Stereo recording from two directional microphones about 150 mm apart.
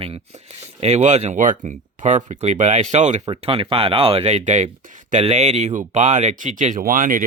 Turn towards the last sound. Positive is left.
turn(degrees=-65)  # may be behind; listen again after turning